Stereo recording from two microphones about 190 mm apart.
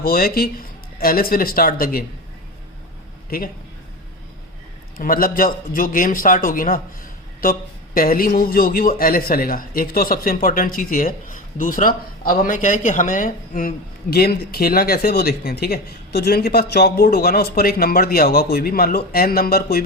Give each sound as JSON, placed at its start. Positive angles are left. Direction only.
{"t": 0.0, "sound": "a man's voice", "side_deg": 50}
{"t": 3.2, "sound": "speech", "side_deg": 50}
{"t": 4.9, "sound": "a man's voice", "side_deg": 50}